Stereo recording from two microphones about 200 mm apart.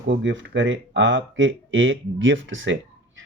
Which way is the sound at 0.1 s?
65° right (ahead or behind).